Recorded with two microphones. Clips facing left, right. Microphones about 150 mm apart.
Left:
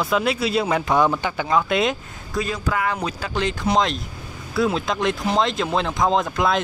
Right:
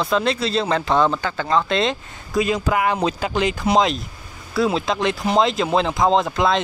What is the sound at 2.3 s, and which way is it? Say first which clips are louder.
Speech: right 5 dB; 15° right (ahead or behind).